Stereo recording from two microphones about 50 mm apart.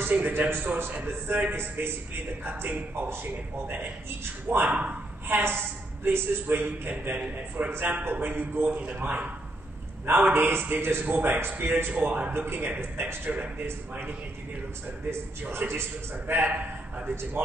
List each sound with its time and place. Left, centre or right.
0.0 s a man's voice: right
5.3 s a man's voice: right
6.9 s a man's voice: right
8.0 s a man's voice: right
8.6 s a man's voice: right